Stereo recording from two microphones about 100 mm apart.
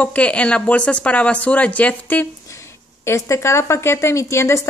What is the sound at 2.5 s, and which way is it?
Speech, 30° left (ahead or behind).